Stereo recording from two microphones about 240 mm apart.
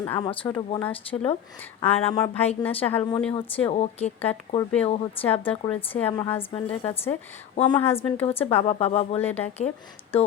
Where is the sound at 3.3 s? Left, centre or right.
Left.